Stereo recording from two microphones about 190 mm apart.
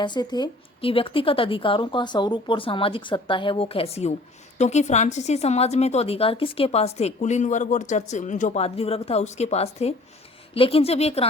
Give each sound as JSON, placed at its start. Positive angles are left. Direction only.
{"t": 0.0, "sound": "a woman's voice", "side_deg": 25}